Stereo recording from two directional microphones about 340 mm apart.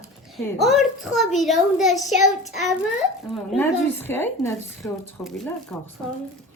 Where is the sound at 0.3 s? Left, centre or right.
Centre.